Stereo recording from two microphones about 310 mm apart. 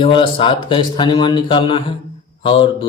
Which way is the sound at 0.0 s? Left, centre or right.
Centre.